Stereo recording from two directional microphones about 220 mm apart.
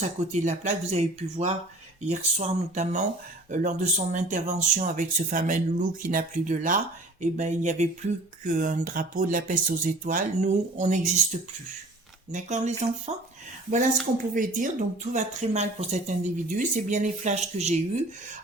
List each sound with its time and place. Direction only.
0.3 s speech: 30° right (ahead or behind)
14.3 s speech: 35° right (ahead or behind)